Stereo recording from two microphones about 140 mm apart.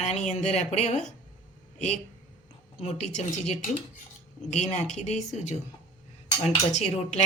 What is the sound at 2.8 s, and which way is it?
Speech, 50° left (ahead or behind).